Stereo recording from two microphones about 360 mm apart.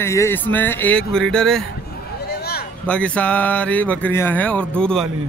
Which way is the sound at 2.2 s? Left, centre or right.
Left.